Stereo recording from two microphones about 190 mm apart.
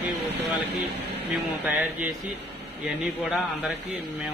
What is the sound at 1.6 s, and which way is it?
Speech, 5° right (ahead or behind).